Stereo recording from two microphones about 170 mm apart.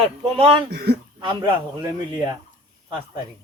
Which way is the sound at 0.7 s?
70° right (ahead or behind).